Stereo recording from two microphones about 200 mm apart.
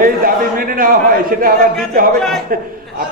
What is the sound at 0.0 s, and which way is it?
A man's voice, 45° right (ahead or behind).